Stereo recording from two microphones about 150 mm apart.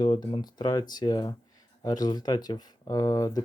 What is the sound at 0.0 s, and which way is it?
Speech, 30° left (ahead or behind).